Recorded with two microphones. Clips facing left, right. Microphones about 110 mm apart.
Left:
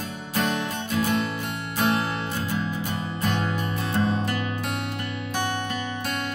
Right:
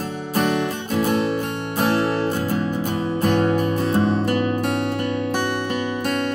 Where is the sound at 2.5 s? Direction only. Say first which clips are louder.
Right 6 dB; 45° right (ahead or behind).